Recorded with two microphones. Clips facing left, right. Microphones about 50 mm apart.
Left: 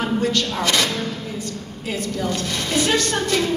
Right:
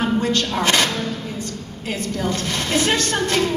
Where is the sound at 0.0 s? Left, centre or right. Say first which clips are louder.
Right 1 dB; right.